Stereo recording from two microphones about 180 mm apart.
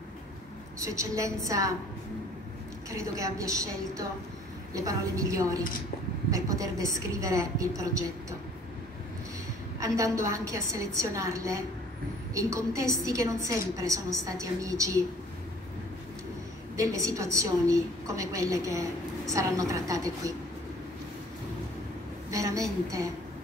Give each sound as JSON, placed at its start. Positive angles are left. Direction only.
{"t": 0.7, "sound": "a woman's voice", "side_deg": -15}
{"t": 2.9, "sound": "a woman's voice", "side_deg": -20}
{"t": 9.8, "sound": "a woman's voice", "side_deg": -20}
{"t": 16.7, "sound": "a woman's voice", "side_deg": -15}
{"t": 22.3, "sound": "a sound", "side_deg": -20}